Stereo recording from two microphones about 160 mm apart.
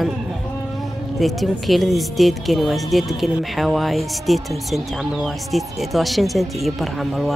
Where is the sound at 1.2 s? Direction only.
Centre (ahead or behind).